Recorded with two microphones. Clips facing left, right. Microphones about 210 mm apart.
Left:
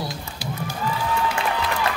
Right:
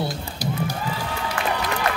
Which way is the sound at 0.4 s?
40° right (ahead or behind).